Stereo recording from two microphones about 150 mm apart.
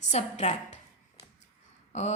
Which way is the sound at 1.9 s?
50° left (ahead or behind).